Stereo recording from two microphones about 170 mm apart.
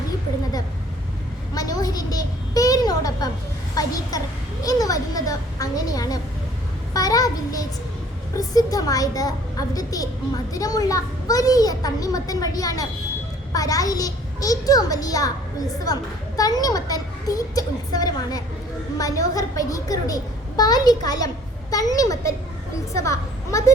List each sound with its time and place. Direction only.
1.5 s a sound: 20° left (ahead or behind)
3.8 s a child's voice: 20° left (ahead or behind)
16.4 s a woman's voice: 20° left (ahead or behind)